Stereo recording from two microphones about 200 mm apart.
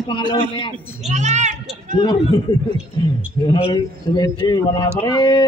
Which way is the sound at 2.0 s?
25° left (ahead or behind).